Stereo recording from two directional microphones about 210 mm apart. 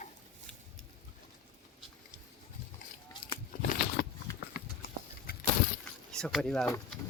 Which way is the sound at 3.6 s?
50° left (ahead or behind).